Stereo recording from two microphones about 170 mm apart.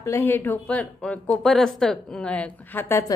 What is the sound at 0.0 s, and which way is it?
Speech, 15° left (ahead or behind).